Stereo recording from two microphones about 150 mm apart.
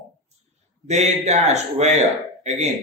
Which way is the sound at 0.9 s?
50° right (ahead or behind).